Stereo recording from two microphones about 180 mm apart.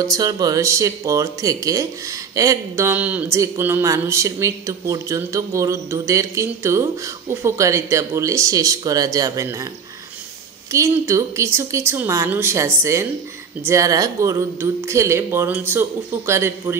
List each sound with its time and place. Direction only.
0.0 s speech: 20° right (ahead or behind)
10.7 s speech: 15° right (ahead or behind)